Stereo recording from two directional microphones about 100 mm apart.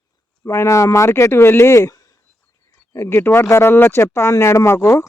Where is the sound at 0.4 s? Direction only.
30° left (ahead or behind).